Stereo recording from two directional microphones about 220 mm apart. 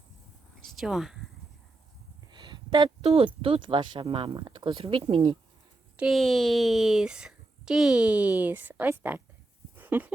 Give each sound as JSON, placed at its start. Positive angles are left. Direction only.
{"t": 0.8, "sound": "a woman's voice", "side_deg": 0}
{"t": 2.3, "sound": "a sound", "side_deg": -20}
{"t": 3.4, "sound": "speech", "side_deg": -25}
{"t": 6.0, "sound": "a woman's voice", "side_deg": 0}